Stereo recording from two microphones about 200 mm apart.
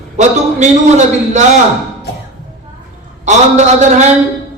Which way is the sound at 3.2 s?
35° right (ahead or behind).